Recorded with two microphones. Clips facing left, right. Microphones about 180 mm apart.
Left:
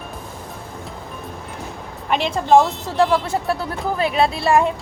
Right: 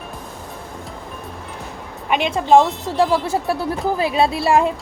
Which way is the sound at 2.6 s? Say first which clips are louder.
Even; centre (ahead or behind).